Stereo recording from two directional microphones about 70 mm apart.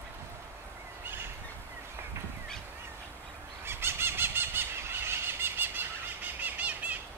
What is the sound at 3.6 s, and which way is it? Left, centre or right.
Squeal, right.